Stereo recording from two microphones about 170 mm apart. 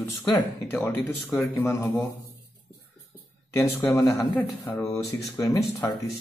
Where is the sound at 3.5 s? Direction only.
15° left (ahead or behind).